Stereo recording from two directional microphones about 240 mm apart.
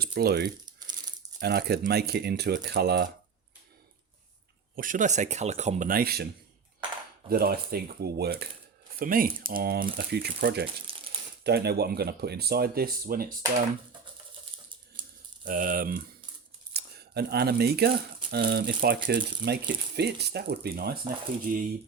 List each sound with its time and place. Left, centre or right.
0.0 s speech: right
4.7 s speech: right
7.3 s speech: right
15.4 s speech: right